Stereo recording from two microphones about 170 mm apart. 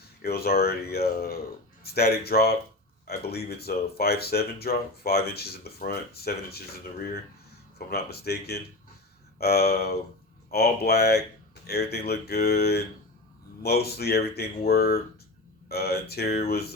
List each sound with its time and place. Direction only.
0.2 s speech: 65° left (ahead or behind)
7.9 s speech: 70° left (ahead or behind)